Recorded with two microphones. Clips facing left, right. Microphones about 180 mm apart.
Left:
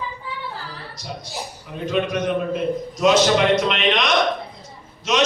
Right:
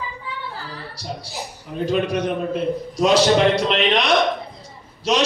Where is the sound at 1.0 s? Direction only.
35° right (ahead or behind).